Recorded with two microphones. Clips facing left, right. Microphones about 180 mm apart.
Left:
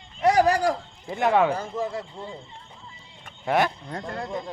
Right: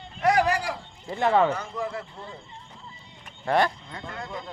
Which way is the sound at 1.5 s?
25° left (ahead or behind).